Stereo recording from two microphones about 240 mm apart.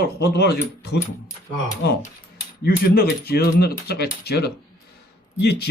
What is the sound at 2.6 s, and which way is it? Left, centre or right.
Speech, left.